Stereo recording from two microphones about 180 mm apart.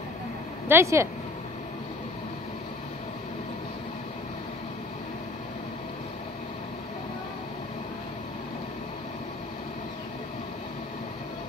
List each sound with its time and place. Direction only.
0.7 s speech: 15° right (ahead or behind)